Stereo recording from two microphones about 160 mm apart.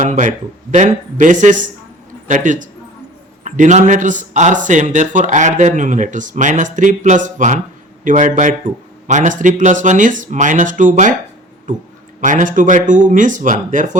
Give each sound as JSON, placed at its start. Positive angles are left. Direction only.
{"t": 0.0, "sound": "a man's voice", "side_deg": -50}